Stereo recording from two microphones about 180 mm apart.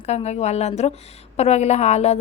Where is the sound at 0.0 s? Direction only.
35° left (ahead or behind).